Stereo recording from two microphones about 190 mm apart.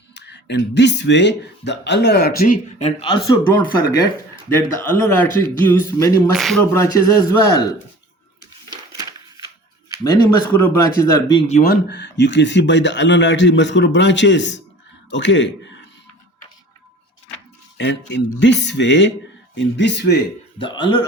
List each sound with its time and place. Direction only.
0.1 s speech: 65° left (ahead or behind)
2.7 s speech: 30° left (ahead or behind)
3.2 s speech: 15° left (ahead or behind)
6.3 s speech: centre (ahead or behind)
6.7 s speech: 15° left (ahead or behind)
8.7 s a sound: 20° right (ahead or behind)
10.8 s speech: 15° left (ahead or behind)
11.6 s a man's voice: 55° left (ahead or behind)
17.7 s speech: 70° left (ahead or behind)
20.6 s speech: 25° left (ahead or behind)